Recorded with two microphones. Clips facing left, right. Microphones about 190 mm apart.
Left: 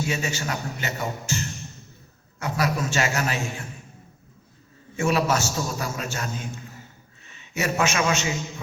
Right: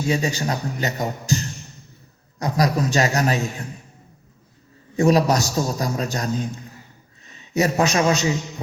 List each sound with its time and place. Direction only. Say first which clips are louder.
0.1 s a man's voice: right 6 dB; 35° right (ahead or behind)
4.9 s a man's voice: right 6 dB; 35° right (ahead or behind)